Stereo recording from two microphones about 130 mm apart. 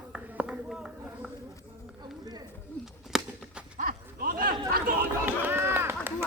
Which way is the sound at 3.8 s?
90° right.